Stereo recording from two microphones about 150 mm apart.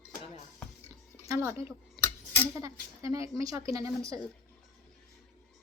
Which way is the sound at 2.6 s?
20° right (ahead or behind).